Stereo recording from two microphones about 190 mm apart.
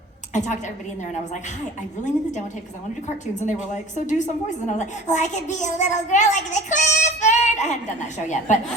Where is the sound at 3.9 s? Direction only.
40° left (ahead or behind).